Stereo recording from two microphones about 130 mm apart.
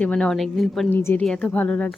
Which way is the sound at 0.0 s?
10° left (ahead or behind).